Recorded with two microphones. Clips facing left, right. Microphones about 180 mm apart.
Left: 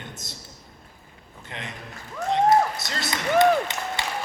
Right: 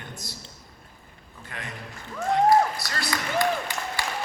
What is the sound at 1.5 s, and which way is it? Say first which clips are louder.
A man's voice: left 1 dB; 20° left (ahead or behind).